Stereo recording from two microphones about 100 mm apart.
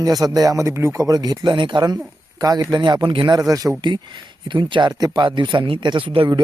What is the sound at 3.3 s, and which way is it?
Speech, 35° right (ahead or behind).